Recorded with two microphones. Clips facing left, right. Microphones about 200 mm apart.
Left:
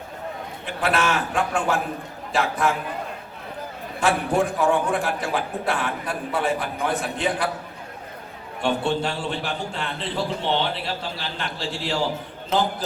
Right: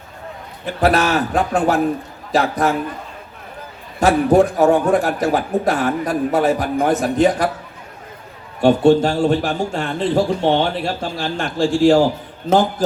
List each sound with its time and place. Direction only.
0.6 s a man's voice: 40° right (ahead or behind)
4.0 s a man's voice: 40° right (ahead or behind)
8.6 s a man's voice: 40° right (ahead or behind)